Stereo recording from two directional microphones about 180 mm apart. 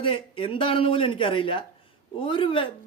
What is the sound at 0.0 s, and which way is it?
A man's voice, 30° left (ahead or behind).